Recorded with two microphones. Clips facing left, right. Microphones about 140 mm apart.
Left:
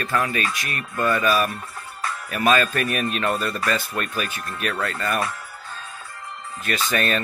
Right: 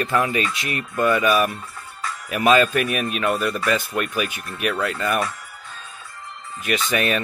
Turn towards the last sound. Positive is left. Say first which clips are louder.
# right 2 dB
turn(degrees=-15)  # may be behind; listen again after turning